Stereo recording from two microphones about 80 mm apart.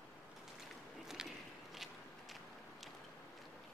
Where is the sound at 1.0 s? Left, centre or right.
Centre.